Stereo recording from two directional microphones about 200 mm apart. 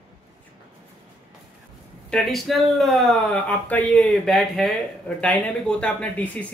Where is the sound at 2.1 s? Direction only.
Centre (ahead or behind).